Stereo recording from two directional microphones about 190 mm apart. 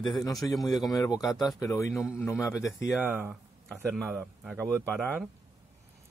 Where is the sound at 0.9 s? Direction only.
20° left (ahead or behind).